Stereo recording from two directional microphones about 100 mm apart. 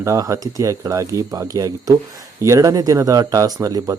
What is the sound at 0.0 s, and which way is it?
Speech, 35° right (ahead or behind).